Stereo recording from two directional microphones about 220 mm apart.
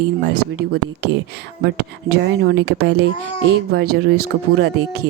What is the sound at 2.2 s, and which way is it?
Speech, 50° right (ahead or behind).